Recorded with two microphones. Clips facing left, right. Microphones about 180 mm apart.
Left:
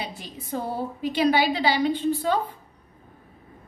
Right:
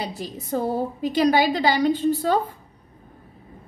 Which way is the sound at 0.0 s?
40° right (ahead or behind).